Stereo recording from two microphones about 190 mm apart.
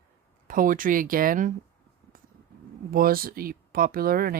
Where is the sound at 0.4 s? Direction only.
45° right (ahead or behind).